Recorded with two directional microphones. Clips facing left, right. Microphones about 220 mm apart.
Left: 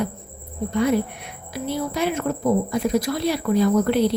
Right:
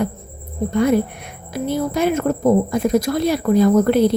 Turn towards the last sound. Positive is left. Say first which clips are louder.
# right 5 dB
turn(degrees=-45)  # may be behind; listen again after turning